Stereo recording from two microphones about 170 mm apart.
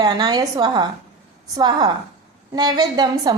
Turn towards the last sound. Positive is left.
turn(degrees=-25)  # may be behind; listen again after turning